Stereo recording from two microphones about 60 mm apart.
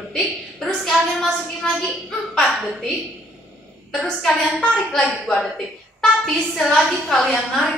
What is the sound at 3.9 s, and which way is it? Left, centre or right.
A woman's voice, centre.